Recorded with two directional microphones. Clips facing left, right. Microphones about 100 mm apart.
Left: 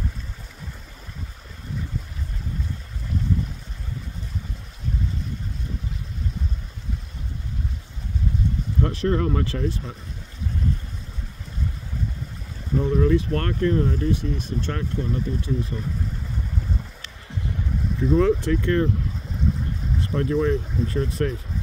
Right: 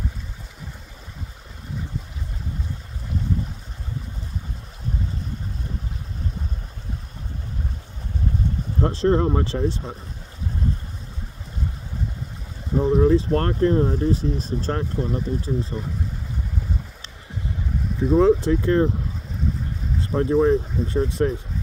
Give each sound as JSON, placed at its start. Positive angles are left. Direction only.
{"t": 8.8, "sound": "speech", "side_deg": -30}
{"t": 12.7, "sound": "speech", "side_deg": -25}
{"t": 18.1, "sound": "speech", "side_deg": -25}
{"t": 20.0, "sound": "speech", "side_deg": -25}